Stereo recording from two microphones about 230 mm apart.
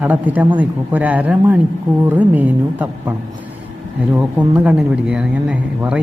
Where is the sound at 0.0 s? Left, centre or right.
Centre.